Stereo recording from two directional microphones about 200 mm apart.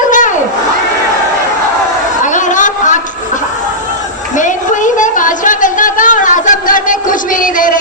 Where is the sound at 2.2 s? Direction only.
40° left (ahead or behind).